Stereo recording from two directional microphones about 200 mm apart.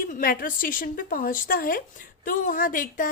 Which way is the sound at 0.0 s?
45° left (ahead or behind).